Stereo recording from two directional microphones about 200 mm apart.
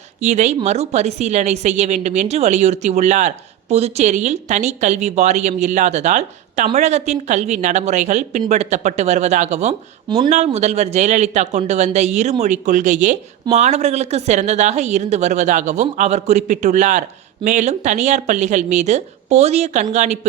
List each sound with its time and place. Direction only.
0.2 s a woman's voice: 35° right (ahead or behind)